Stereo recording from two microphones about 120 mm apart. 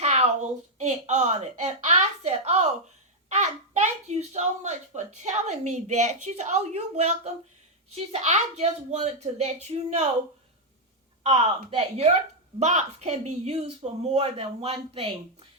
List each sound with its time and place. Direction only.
0.0 s a sound: 65° right (ahead or behind)
3.2 s a child's voice: 80° right; by 10.1 s 60° right (ahead or behind)
11.2 s speech: 60° right (ahead or behind)